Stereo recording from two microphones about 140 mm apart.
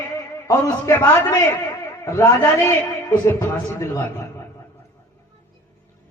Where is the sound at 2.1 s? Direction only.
20° left (ahead or behind).